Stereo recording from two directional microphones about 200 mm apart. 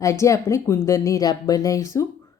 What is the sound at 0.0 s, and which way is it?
Speech, 15° left (ahead or behind).